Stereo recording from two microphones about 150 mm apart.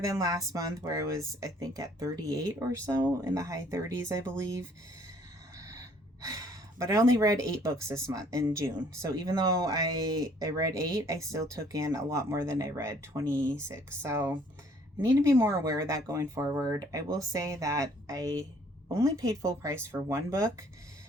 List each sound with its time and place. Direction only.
0.0 s speech: 25° right (ahead or behind)
5.5 s gasp: 20° right (ahead or behind)
6.2 s a sound: 25° right (ahead or behind)
6.9 s speech: 20° right (ahead or behind)